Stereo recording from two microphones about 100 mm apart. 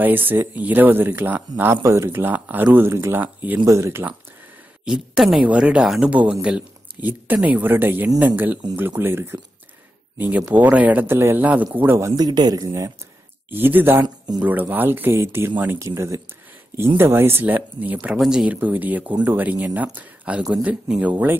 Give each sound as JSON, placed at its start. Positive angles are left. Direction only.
{"t": 0.0, "sound": "a man's voice", "side_deg": -20}
{"t": 3.6, "sound": "a man's voice", "side_deg": -30}
{"t": 4.8, "sound": "a man's voice", "side_deg": -5}
{"t": 12.2, "sound": "speech", "side_deg": -40}
{"t": 13.5, "sound": "a man's voice", "side_deg": -20}
{"t": 14.0, "sound": "speech", "side_deg": -45}
{"t": 14.4, "sound": "a man's voice", "side_deg": -20}